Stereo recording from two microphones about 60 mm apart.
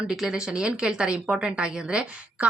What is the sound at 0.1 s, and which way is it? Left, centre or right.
A woman's voice, centre.